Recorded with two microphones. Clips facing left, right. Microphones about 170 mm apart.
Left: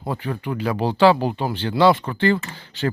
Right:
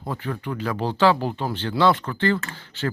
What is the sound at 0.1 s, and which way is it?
Speech, 15° left (ahead or behind).